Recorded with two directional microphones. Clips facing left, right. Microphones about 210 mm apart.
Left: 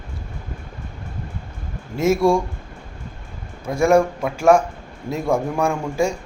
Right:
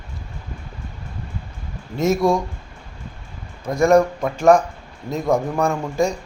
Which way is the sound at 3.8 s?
5° left (ahead or behind).